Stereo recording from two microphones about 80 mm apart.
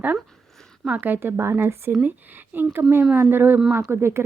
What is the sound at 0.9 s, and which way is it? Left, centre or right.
A woman's voice, right.